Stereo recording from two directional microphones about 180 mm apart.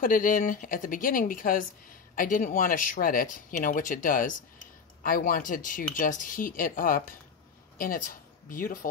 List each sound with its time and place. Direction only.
0.0 s speech: 50° left (ahead or behind)